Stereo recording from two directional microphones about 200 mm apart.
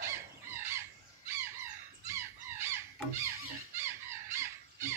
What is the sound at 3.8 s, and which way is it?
Squawk, 15° right (ahead or behind).